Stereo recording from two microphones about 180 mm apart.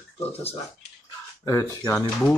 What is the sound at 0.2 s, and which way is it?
Speech, 35° left (ahead or behind).